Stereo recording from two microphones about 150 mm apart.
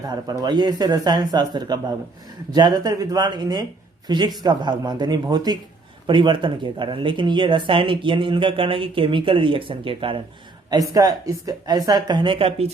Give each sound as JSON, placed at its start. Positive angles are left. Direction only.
{"t": 0.1, "sound": "speech", "side_deg": -25}
{"t": 10.7, "sound": "speech", "side_deg": -25}